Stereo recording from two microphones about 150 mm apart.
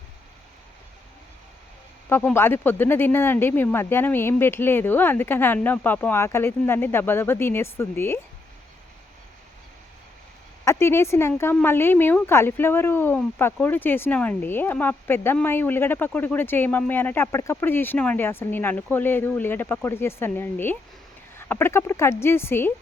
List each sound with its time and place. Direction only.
2.0 s speech: 15° left (ahead or behind)
10.7 s speech: 15° left (ahead or behind)